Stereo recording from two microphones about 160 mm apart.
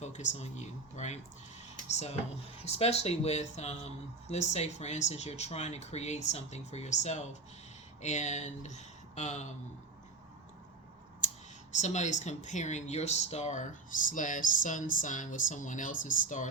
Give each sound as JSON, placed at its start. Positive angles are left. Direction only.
{"t": 0.0, "sound": "speech", "side_deg": 45}
{"t": 11.8, "sound": "speech", "side_deg": 50}